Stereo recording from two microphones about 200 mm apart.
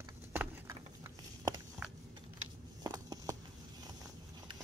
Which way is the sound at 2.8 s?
20° right (ahead or behind).